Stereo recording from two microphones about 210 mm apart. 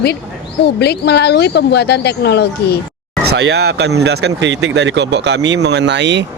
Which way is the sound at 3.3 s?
55° right (ahead or behind).